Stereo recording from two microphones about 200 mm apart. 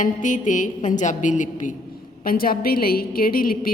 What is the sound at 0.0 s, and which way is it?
A woman's voice, 40° left (ahead or behind).